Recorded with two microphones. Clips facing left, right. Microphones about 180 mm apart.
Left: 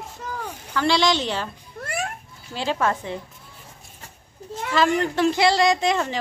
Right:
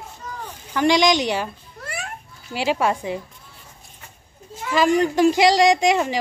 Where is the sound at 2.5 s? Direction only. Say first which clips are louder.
Right 3 dB; 15° right (ahead or behind).